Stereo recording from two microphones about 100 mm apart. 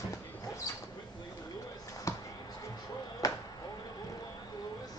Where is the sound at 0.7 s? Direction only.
35° left (ahead or behind).